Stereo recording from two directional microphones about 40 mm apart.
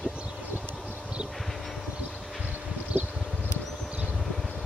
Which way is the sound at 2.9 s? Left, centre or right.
Right.